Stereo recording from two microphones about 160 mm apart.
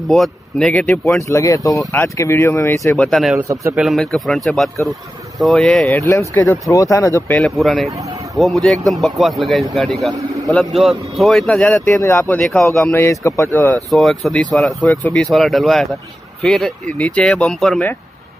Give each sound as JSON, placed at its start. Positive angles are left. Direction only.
{"t": 0.1, "sound": "speech", "side_deg": 5}
{"t": 1.3, "sound": "speech", "side_deg": 20}
{"t": 3.0, "sound": "speech", "side_deg": 0}
{"t": 5.9, "sound": "speech", "side_deg": 20}
{"t": 7.3, "sound": "speech", "side_deg": 0}
{"t": 10.1, "sound": "a sound", "side_deg": -20}
{"t": 10.5, "sound": "speech", "side_deg": 0}
{"t": 11.9, "sound": "speech", "side_deg": 20}
{"t": 13.8, "sound": "speech", "side_deg": 0}